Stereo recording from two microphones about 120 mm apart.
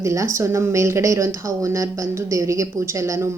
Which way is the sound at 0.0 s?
25° right (ahead or behind).